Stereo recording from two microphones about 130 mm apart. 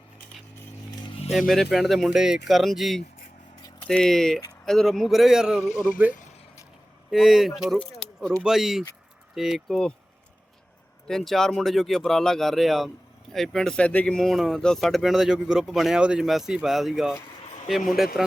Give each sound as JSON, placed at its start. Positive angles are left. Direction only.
{"t": 1.3, "sound": "speech", "side_deg": 0}
{"t": 5.6, "sound": "speech", "side_deg": 80}
{"t": 7.1, "sound": "speech", "side_deg": 0}
{"t": 11.1, "sound": "speech", "side_deg": 0}